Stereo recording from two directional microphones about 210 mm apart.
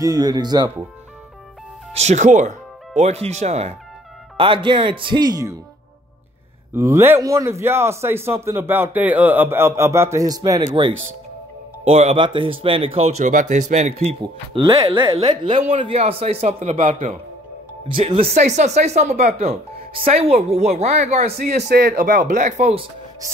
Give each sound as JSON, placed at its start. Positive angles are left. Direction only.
{"t": 0.0, "sound": "speech", "side_deg": -20}
{"t": 2.0, "sound": "speech", "side_deg": -35}
{"t": 6.7, "sound": "a man's voice", "side_deg": -10}
{"t": 10.9, "sound": "speech", "side_deg": -70}
{"t": 11.8, "sound": "speech", "side_deg": -30}
{"t": 21.6, "sound": "speech", "side_deg": -50}